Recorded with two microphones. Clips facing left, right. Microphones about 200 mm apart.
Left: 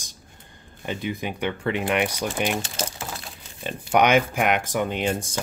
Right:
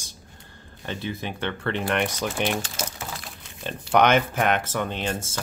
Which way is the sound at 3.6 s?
10° left (ahead or behind).